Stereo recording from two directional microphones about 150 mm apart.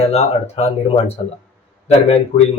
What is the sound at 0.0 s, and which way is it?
Speech, 45° left (ahead or behind).